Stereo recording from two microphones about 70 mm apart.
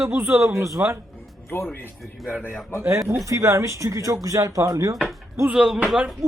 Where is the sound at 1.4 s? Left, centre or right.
Left.